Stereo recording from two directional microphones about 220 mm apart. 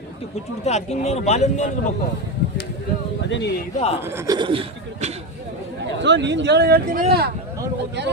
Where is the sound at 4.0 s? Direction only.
10° right (ahead or behind); by 5.2 s 25° right (ahead or behind).